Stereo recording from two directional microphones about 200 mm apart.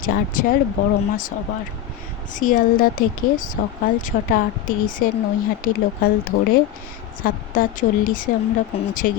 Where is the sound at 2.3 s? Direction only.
40° left (ahead or behind).